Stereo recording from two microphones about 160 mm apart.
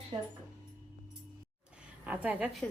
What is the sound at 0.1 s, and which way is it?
Speech, 30° right (ahead or behind).